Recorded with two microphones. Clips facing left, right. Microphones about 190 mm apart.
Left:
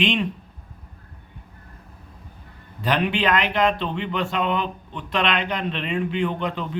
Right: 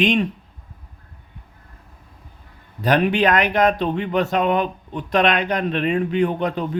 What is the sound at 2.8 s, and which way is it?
Speech, 45° right (ahead or behind).